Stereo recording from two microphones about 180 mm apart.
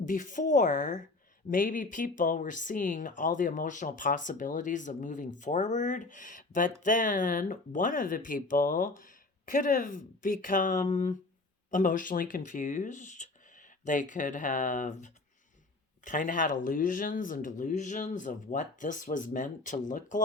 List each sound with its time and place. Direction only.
0.0 s speech: 45° left (ahead or behind)